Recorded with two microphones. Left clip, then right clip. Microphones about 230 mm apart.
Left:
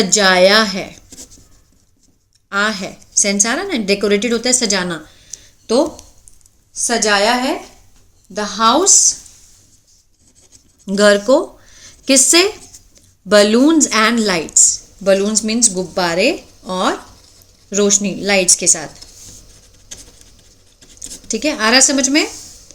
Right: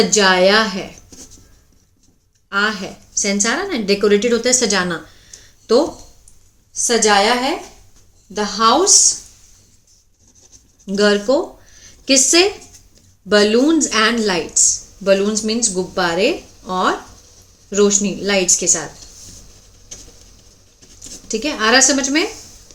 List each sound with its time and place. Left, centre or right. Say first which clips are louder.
0.0 s a woman's voice: left 2 dB; left
2.5 s a woman's voice: left 1 dB; left
6.8 s a woman's voice: right 1 dB; centre
10.8 s a woman's voice: left 4 dB; left
21.2 s a woman's voice: left 1 dB; left